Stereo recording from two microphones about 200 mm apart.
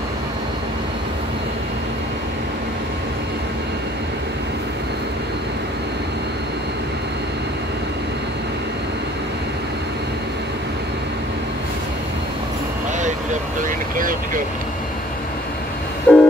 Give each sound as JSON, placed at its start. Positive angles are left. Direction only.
{"t": 13.6, "sound": "vehicle", "side_deg": -40}
{"t": 16.1, "sound": "train", "side_deg": 5}